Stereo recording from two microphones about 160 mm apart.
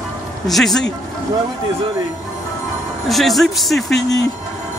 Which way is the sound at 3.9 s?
90° left.